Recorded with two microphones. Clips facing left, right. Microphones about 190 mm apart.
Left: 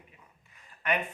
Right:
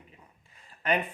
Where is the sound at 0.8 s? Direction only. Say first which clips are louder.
Right 3 dB; 30° right (ahead or behind).